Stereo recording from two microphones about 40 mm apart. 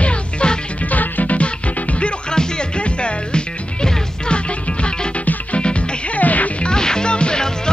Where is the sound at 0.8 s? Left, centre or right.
Left.